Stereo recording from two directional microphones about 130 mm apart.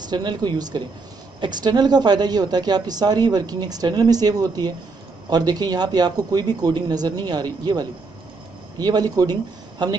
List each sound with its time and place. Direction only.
0.1 s speech: 35° right (ahead or behind)